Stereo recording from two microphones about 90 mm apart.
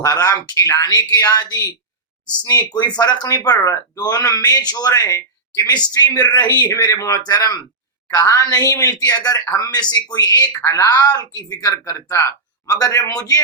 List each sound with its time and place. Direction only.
0.0 s speech: 40° left (ahead or behind)
10.6 s speech: 30° left (ahead or behind)
10.8 s speech: 45° left (ahead or behind)